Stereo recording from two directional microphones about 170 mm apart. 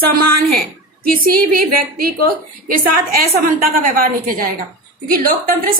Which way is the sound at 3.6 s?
60° right (ahead or behind).